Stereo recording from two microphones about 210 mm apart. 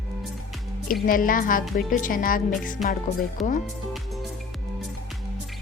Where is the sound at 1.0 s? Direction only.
40° left (ahead or behind).